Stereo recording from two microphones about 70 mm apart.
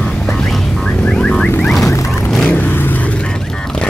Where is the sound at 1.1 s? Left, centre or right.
Centre.